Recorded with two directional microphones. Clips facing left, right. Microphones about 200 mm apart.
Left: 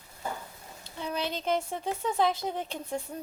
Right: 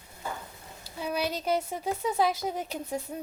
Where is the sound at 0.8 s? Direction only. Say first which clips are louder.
Right 2 dB; 10° right (ahead or behind).